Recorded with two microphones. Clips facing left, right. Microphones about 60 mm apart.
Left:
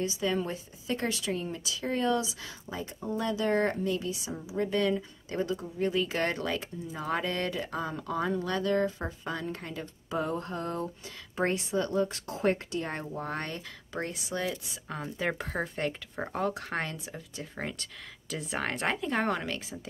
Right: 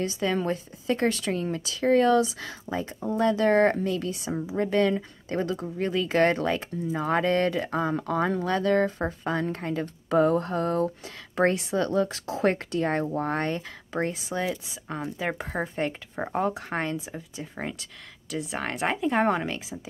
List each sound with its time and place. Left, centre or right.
0.0 s speech: right
10.0 s a sound: right
11.3 s speech: right
13.9 s speech: right
14.3 s speech: centre
15.0 s speech: centre